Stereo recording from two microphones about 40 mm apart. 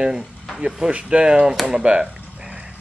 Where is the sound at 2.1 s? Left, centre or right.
Right.